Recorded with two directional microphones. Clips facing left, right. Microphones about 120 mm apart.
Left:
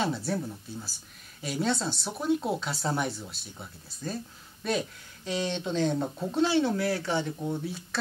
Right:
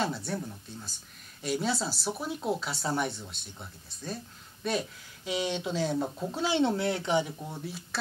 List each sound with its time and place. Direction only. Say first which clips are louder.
0.0 s speech: left 2 dB; centre (ahead or behind)
1.4 s speech: left 1 dB; centre (ahead or behind)
6.5 s speech: left 1 dB; 25° right (ahead or behind)
7.4 s speech: left 7 dB; centre (ahead or behind)